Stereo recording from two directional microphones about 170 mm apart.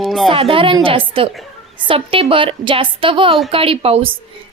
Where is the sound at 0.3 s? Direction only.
35° right (ahead or behind).